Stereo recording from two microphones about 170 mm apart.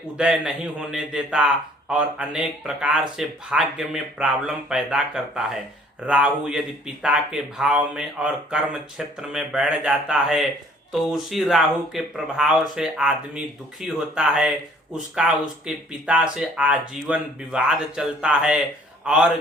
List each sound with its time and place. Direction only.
0.2 s a man's voice: 5° right (ahead or behind)